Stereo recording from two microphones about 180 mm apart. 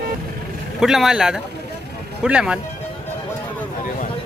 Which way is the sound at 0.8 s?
Centre (ahead or behind).